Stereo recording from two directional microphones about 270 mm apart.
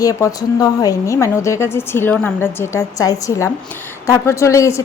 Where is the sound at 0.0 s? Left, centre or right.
Centre.